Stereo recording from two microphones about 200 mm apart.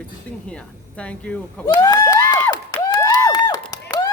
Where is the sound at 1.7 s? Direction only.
20° left (ahead or behind).